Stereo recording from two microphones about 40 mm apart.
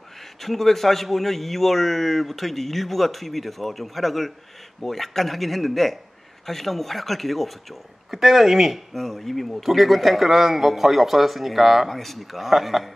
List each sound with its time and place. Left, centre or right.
0.4 s speech: centre